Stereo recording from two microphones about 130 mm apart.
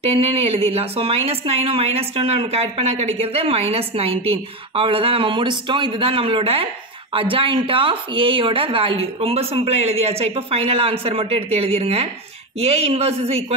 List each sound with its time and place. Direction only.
0.0 s speech: 50° right (ahead or behind)